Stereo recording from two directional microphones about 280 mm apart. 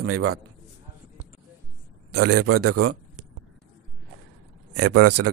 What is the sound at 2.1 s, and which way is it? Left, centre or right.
Speech, right.